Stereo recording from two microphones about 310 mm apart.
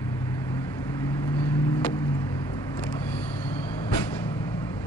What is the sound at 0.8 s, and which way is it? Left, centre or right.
Vehicle, centre.